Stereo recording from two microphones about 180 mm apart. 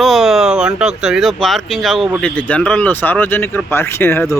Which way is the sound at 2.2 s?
5° left (ahead or behind).